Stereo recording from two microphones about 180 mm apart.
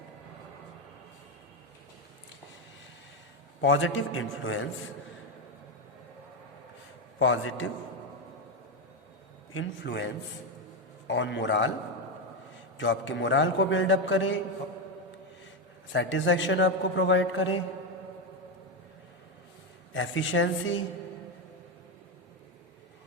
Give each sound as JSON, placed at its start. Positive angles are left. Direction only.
{"t": 3.6, "sound": "a man's voice", "side_deg": 90}
{"t": 7.2, "sound": "a man's voice", "side_deg": 90}
{"t": 9.6, "sound": "a man's voice", "side_deg": 80}
{"t": 11.1, "sound": "a man's voice", "side_deg": 85}
{"t": 12.7, "sound": "a man's voice", "side_deg": 90}
{"t": 15.9, "sound": "a man's voice", "side_deg": 90}
{"t": 19.9, "sound": "a man's voice", "side_deg": 90}